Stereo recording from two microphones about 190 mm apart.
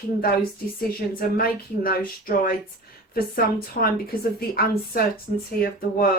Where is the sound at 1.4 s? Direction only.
50° left (ahead or behind).